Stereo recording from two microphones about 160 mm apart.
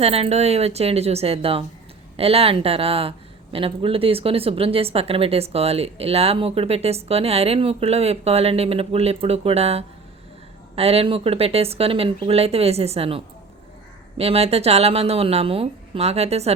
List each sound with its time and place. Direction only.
0.0 s a woman's voice: 40° right (ahead or behind)